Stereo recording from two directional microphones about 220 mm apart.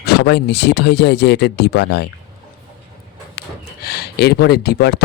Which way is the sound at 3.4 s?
45° left (ahead or behind).